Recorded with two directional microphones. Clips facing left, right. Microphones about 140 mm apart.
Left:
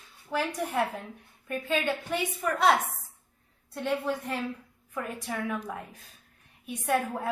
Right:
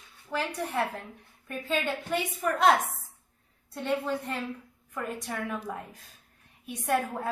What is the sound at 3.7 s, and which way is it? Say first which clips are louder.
A woman's voice: even; 10° left (ahead or behind).